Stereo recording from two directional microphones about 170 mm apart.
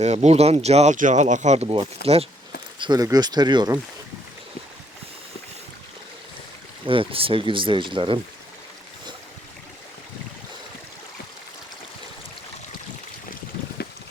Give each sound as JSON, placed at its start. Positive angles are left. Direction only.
{"t": 0.0, "sound": "speech", "side_deg": -40}
{"t": 2.0, "sound": "speech", "side_deg": 70}
{"t": 2.7, "sound": "speech", "side_deg": -25}
{"t": 6.8, "sound": "speech", "side_deg": -30}